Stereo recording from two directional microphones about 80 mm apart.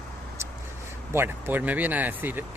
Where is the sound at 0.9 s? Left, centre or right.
Right.